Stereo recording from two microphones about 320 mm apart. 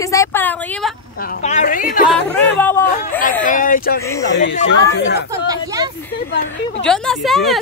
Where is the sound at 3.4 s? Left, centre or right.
Left.